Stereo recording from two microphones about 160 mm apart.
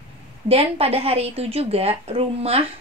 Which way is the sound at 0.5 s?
40° right (ahead or behind).